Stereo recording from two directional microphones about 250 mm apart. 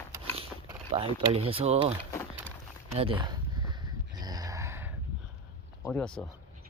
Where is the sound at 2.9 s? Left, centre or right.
Right.